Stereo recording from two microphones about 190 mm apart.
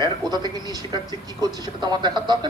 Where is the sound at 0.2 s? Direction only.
20° right (ahead or behind).